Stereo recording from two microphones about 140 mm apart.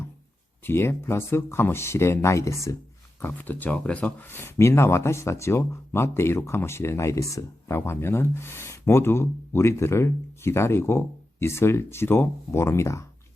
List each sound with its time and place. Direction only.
0.6 s speech: 15° left (ahead or behind)